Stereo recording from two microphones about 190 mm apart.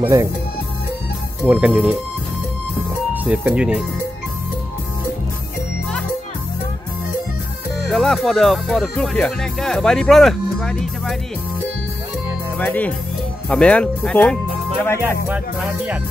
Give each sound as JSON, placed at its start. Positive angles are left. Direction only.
{"t": 0.0, "sound": "music", "side_deg": -15}
{"t": 1.4, "sound": "music", "side_deg": -10}
{"t": 3.3, "sound": "speech", "side_deg": -5}
{"t": 7.8, "sound": "speech", "side_deg": 0}
{"t": 12.5, "sound": "speech", "side_deg": 10}
{"t": 15.2, "sound": "music", "side_deg": -5}